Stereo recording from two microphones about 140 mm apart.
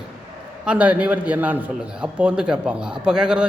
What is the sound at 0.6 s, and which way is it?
Speech, 10° right (ahead or behind).